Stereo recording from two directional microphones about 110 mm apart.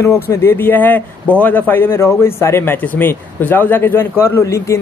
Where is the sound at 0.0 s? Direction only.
25° left (ahead or behind).